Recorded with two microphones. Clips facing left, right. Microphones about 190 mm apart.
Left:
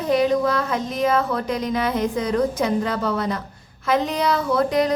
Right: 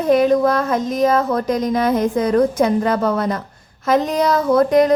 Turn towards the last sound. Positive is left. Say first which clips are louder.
# right 6 dB
turn(degrees=-50)  # may be behind; listen again after turning